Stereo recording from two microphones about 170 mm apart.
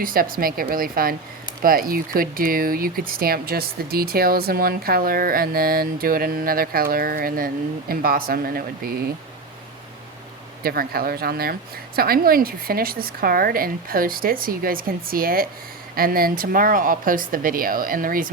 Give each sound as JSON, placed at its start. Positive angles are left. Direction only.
{"t": 0.0, "sound": "speech", "side_deg": -55}
{"t": 10.6, "sound": "speech", "side_deg": -60}